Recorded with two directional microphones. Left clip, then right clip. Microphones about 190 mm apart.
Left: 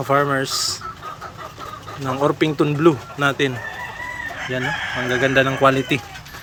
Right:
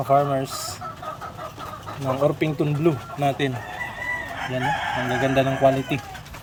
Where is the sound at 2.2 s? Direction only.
Centre (ahead or behind).